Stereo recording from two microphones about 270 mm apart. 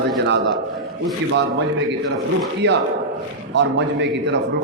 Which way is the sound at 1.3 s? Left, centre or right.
Right.